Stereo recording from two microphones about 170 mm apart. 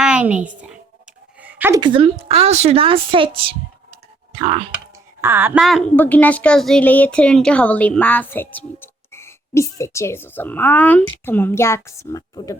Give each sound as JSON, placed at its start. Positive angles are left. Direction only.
{"t": 0.0, "sound": "a sound", "side_deg": -5}
{"t": 1.8, "sound": "a woman's voice", "side_deg": -30}
{"t": 5.2, "sound": "a woman's voice", "side_deg": -15}
{"t": 5.5, "sound": "speech", "side_deg": 0}